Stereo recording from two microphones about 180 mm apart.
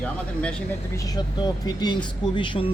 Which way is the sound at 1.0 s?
20° left (ahead or behind).